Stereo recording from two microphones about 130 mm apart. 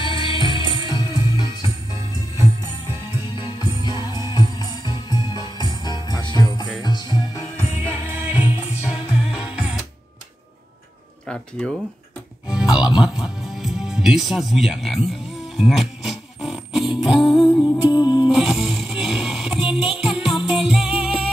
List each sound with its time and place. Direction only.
0.0 s music: 40° left (ahead or behind)
3.3 s music: 35° left (ahead or behind)
8.1 s music: 10° right (ahead or behind)
11.2 s speech: 10° left (ahead or behind)
12.4 s music: 5° right (ahead or behind)
17.6 s music: 35° left (ahead or behind)
18.3 s music: 5° right (ahead or behind)